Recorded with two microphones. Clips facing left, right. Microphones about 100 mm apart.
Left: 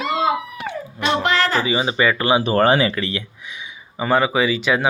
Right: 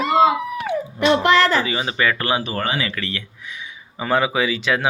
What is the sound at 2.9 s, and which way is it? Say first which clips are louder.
Speech: left 5 dB; 20° left (ahead or behind).